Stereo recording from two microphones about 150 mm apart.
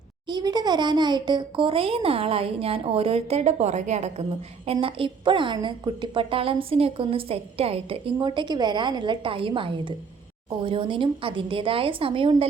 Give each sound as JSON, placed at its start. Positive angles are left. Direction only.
{"t": 0.3, "sound": "a woman's voice", "side_deg": -30}
{"t": 4.6, "sound": "a woman's voice", "side_deg": -40}